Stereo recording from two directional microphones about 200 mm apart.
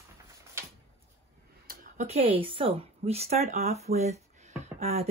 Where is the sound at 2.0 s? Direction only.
30° right (ahead or behind).